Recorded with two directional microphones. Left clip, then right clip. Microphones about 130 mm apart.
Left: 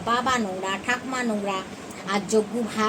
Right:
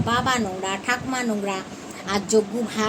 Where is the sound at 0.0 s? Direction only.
15° right (ahead or behind).